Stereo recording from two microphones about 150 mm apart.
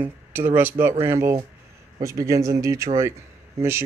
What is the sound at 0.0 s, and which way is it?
Speech, 15° right (ahead or behind).